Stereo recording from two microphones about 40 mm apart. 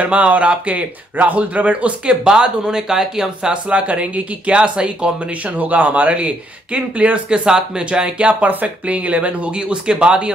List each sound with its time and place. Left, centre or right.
0.0 s speech: right
2.2 s speech: right
3.6 s speech: right
5.6 s speech: right
7.2 s speech: right
8.5 s speech: right